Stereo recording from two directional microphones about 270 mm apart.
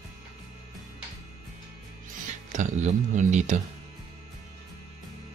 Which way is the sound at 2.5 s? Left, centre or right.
Right.